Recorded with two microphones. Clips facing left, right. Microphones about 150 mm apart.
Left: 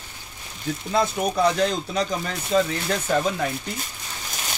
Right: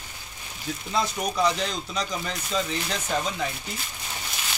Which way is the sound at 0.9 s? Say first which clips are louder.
Left 4 dB; 55° left (ahead or behind).